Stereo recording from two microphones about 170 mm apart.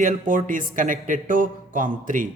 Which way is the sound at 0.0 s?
50° right (ahead or behind).